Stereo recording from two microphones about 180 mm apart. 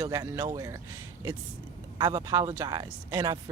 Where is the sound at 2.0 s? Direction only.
20° right (ahead or behind).